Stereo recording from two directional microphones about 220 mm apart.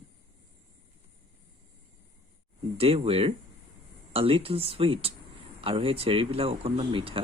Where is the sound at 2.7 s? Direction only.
25° right (ahead or behind).